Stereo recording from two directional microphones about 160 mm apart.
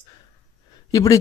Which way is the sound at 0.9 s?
20° left (ahead or behind).